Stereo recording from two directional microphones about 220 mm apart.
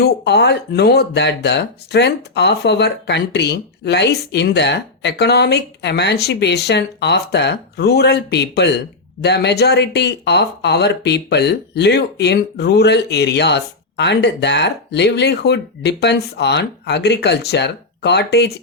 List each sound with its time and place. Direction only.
0.0 s speech: 50° left (ahead or behind)